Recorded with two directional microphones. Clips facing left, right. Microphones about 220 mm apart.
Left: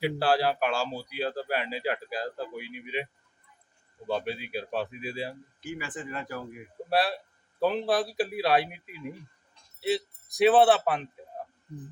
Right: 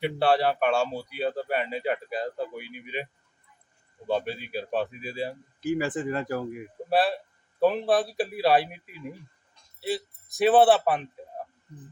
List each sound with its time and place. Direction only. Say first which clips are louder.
0.0 s speech: right 2 dB; centre (ahead or behind)
5.5 s speech: right 12 dB; 40° right (ahead or behind)
6.9 s speech: right 3 dB; centre (ahead or behind)